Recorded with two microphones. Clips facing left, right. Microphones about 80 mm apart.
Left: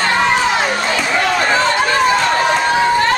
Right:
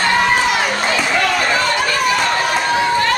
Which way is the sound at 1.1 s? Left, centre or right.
Centre.